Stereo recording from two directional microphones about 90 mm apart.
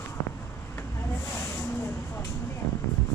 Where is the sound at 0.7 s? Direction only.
30° left (ahead or behind).